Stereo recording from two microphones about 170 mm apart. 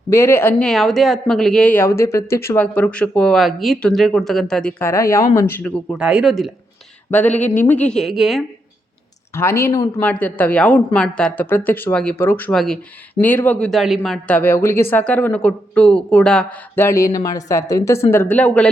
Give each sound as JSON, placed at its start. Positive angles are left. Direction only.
{"t": 0.1, "sound": "speech", "side_deg": 15}
{"t": 0.7, "sound": "speech", "side_deg": 0}
{"t": 4.8, "sound": "speech", "side_deg": 15}
{"t": 6.0, "sound": "speech", "side_deg": -5}
{"t": 7.1, "sound": "speech", "side_deg": 10}
{"t": 9.3, "sound": "speech", "side_deg": 15}